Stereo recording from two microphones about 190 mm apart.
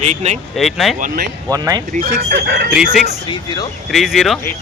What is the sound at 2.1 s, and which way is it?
Speech, 60° right (ahead or behind).